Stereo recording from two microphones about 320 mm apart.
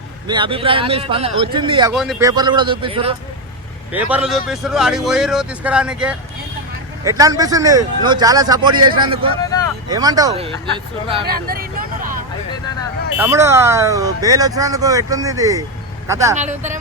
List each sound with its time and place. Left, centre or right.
0.3 s speech: centre
1.9 s speech: centre
3.9 s a man's voice: centre
11.3 s speech: right
13.1 s speech: centre
16.4 s speech: right